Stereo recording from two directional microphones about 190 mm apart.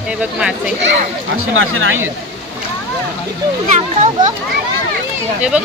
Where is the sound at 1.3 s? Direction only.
90° right.